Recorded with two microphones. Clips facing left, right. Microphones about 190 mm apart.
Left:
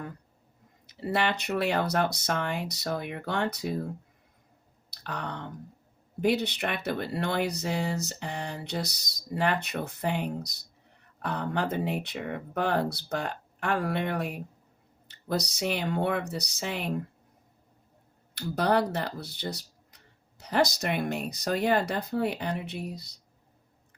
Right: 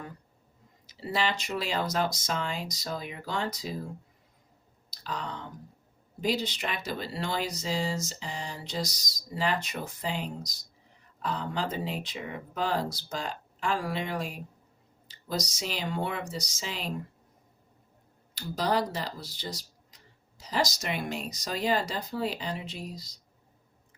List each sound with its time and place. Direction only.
0.9 s speech: 55° left (ahead or behind)
4.9 s speech: 60° left (ahead or behind)
18.3 s speech: 60° left (ahead or behind)